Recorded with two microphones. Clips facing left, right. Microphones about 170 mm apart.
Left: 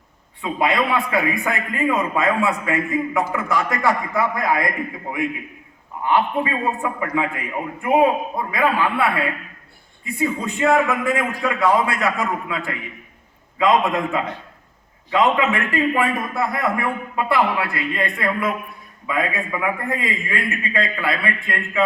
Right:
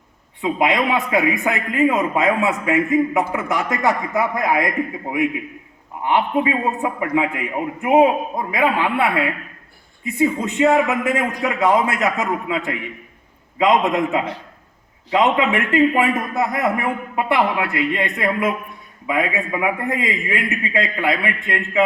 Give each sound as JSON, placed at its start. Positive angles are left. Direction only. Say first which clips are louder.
{"t": 0.4, "sound": "a man's voice", "louder": "right 2 dB", "side_deg": -20}
{"t": 6.1, "sound": "a man's voice", "louder": "right 2 dB", "side_deg": -20}
{"t": 10.2, "sound": "a man's voice", "louder": "right 4 dB", "side_deg": -20}
{"t": 15.2, "sound": "a man's voice", "louder": "right 1 dB", "side_deg": -20}